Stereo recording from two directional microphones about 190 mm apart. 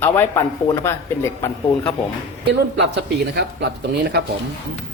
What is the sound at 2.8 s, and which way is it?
Speech, 65° right (ahead or behind).